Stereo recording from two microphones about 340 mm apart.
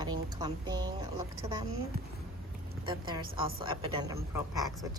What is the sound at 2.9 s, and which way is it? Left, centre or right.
Speech, centre.